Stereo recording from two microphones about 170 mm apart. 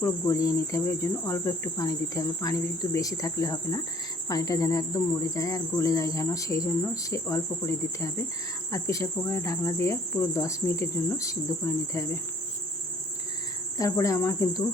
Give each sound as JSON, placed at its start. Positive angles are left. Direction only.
{"t": 0.0, "sound": "speech", "side_deg": 20}
{"t": 13.7, "sound": "speech", "side_deg": 20}